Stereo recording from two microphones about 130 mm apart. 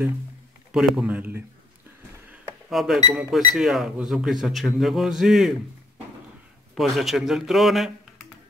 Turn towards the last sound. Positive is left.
turn(degrees=0)  # may be behind; listen again after turning